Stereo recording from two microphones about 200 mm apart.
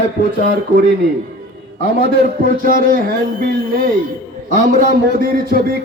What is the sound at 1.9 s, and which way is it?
A man's voice, 50° right (ahead or behind).